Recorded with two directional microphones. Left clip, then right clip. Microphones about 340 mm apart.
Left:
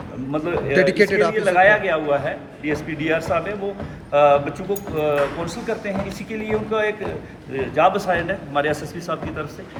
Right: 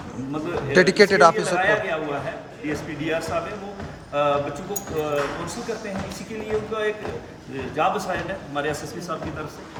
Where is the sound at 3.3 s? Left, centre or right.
Centre.